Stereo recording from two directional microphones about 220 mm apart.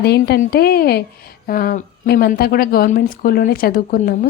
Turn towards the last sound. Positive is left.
turn(degrees=40)  # may be behind; listen again after turning